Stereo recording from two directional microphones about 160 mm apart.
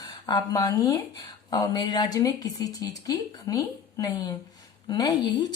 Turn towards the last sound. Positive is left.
turn(degrees=25)  # may be behind; listen again after turning